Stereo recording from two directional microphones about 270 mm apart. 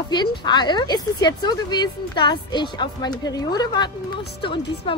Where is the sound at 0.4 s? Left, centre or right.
Centre.